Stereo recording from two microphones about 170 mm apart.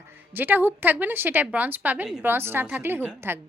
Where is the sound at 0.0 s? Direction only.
10° right (ahead or behind).